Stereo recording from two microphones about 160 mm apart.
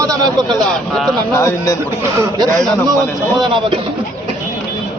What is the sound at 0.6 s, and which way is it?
Speech, centre (ahead or behind).